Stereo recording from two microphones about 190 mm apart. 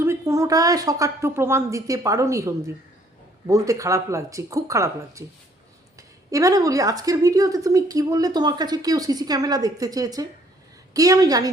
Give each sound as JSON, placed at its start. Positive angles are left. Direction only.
{"t": 0.0, "sound": "a woman's voice", "side_deg": -15}